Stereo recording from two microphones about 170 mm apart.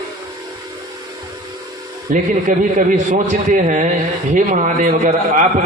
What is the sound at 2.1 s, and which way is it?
A man's voice, 50° right (ahead or behind).